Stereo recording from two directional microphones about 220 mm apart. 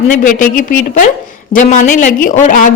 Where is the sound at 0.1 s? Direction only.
35° left (ahead or behind).